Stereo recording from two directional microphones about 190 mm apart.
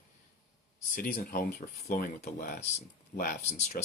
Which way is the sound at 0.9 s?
45° left (ahead or behind).